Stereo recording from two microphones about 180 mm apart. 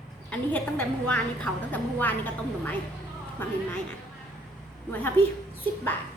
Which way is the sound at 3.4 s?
10° left (ahead or behind).